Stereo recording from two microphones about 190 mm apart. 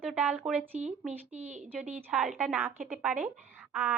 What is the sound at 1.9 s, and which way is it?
A woman's voice, 5° right (ahead or behind).